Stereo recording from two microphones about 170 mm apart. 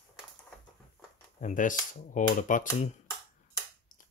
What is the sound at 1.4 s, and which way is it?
Speech, 50° left (ahead or behind).